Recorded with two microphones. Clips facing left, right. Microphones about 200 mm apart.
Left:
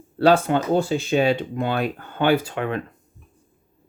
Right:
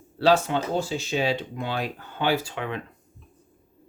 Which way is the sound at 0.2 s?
55° left (ahead or behind).